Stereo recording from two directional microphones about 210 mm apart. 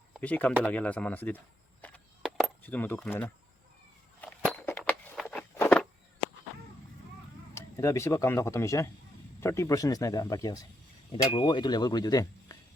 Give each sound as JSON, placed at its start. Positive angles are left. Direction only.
{"t": 0.1, "sound": "speech", "side_deg": 5}
{"t": 1.8, "sound": "a sound", "side_deg": 5}
{"t": 4.2, "sound": "walk", "side_deg": 5}
{"t": 7.5, "sound": "speech", "side_deg": 15}